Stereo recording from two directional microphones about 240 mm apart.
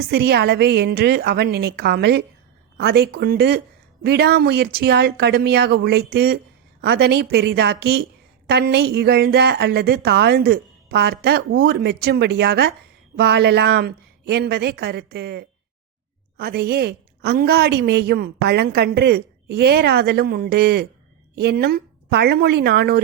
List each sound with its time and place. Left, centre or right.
0.1 s a woman's voice: right